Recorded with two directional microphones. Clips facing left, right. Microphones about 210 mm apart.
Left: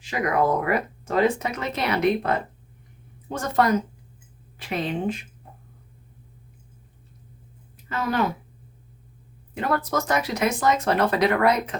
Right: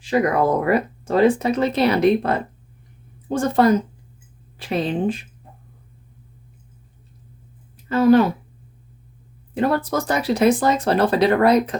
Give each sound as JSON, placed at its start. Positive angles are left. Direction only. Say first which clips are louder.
{"t": 0.0, "sound": "speech", "louder": "right 5 dB", "side_deg": -30}
{"t": 7.9, "sound": "speech", "louder": "right 11 dB", "side_deg": -30}
{"t": 9.6, "sound": "speech", "louder": "right 5 dB", "side_deg": -30}